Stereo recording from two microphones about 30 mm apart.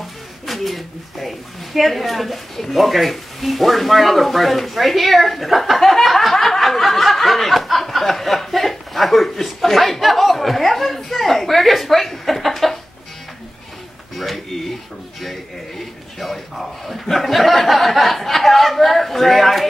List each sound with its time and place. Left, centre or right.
0.0 s a man's voice: centre
6.3 s a sound: centre
6.6 s snicker: centre
14.1 s speech: centre
15.8 s a man's voice: centre